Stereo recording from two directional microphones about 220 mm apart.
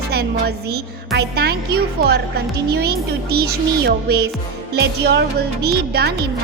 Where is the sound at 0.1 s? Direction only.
45° right (ahead or behind).